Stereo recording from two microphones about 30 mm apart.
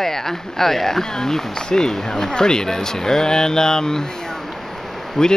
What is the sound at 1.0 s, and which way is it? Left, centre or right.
Speech, centre.